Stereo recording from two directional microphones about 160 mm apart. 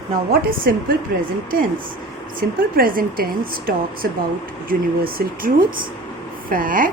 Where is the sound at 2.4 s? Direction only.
70° right (ahead or behind).